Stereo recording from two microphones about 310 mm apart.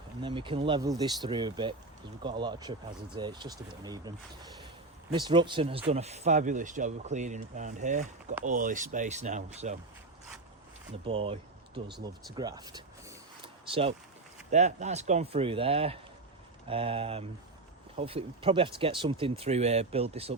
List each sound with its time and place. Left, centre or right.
0.2 s speech: centre
5.1 s speech: centre
11.0 s speech: centre
12.0 s a sound: centre
14.5 s speech: right